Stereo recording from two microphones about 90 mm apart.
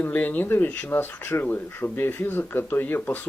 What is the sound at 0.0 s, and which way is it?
Speech, 20° left (ahead or behind).